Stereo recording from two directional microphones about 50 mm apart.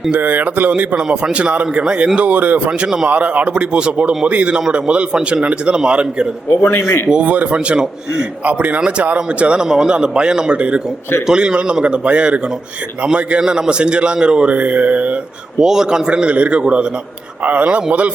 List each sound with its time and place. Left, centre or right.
0.1 s mantra: right
0.7 s speech: right
1.0 s speech: centre
1.3 s speech: right
2.6 s speech: centre
3.1 s speech: right
6.6 s speech: left
7.1 s speech: right
8.4 s mantra: right
9.0 s speech: right
14.5 s mantra: right
15.5 s speech: centre
16.2 s speech: right